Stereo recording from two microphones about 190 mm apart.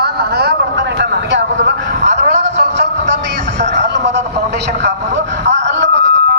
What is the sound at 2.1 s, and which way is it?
Music, 65° right (ahead or behind).